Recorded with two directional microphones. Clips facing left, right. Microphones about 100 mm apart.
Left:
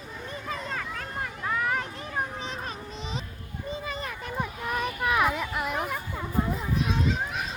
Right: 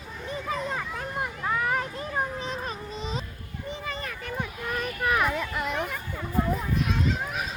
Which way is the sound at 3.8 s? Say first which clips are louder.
Even; 20° left (ahead or behind).